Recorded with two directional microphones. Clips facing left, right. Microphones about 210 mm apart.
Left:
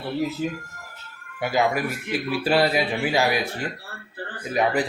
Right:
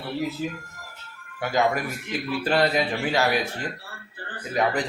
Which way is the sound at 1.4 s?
10° left (ahead or behind).